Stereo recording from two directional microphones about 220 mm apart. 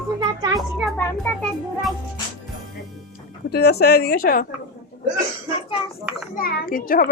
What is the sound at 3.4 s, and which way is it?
Speech, 45° left (ahead or behind).